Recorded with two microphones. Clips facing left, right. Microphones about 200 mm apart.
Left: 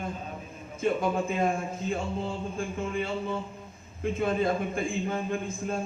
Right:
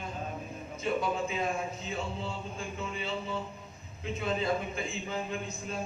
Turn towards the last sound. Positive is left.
turn(degrees=50)  # may be behind; listen again after turning